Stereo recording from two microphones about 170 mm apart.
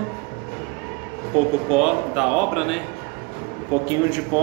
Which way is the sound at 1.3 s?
5° right (ahead or behind).